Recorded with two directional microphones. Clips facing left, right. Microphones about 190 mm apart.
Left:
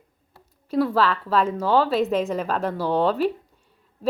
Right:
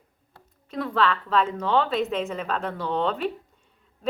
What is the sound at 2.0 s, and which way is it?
Speech, 35° left (ahead or behind).